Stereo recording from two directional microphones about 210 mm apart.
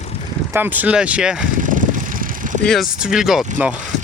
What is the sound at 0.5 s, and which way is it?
Speech, 10° right (ahead or behind).